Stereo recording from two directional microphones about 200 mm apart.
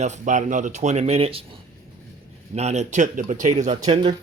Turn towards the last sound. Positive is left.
turn(degrees=-25)  # may be behind; listen again after turning